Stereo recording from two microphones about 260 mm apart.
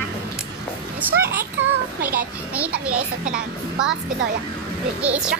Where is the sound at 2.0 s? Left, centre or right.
Right.